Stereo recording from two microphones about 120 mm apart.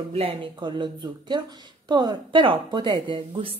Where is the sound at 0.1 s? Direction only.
55° right (ahead or behind).